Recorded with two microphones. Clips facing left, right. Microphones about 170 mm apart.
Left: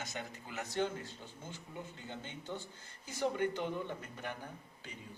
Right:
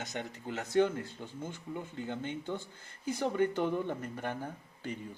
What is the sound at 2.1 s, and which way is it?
Speech, 55° right (ahead or behind).